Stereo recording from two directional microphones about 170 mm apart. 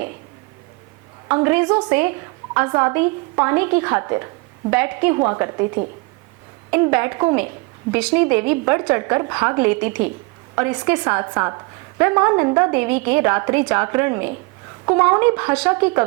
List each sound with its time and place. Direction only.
1.3 s a woman's voice: 15° right (ahead or behind)